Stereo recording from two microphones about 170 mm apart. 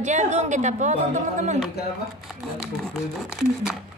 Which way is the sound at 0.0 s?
45° right (ahead or behind).